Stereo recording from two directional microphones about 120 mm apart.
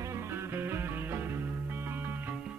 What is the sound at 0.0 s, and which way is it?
Music, 20° right (ahead or behind).